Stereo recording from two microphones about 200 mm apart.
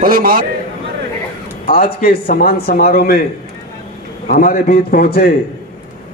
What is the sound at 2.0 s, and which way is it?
Speech, 45° left (ahead or behind).